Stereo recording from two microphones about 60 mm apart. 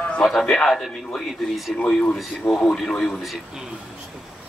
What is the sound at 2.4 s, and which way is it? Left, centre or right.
Speech, left.